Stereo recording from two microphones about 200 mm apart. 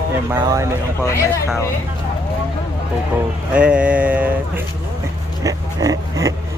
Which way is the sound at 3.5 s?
5° right (ahead or behind).